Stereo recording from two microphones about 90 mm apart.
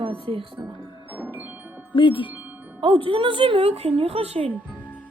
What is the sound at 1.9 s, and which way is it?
Speech, 70° left (ahead or behind).